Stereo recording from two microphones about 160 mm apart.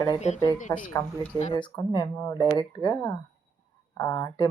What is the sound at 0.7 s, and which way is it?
Speech, 20° left (ahead or behind).